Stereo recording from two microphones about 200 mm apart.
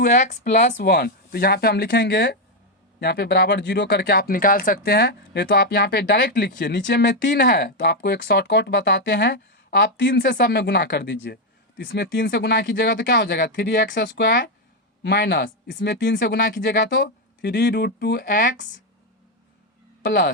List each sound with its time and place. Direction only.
0.0 s speech: 40° left (ahead or behind)